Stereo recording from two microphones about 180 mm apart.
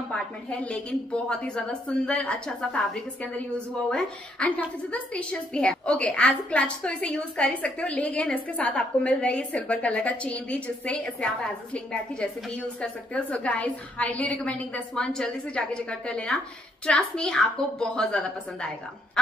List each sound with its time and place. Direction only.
0.1 s a woman's voice: 5° left (ahead or behind)